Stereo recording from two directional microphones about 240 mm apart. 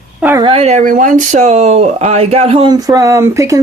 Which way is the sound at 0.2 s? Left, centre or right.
Centre.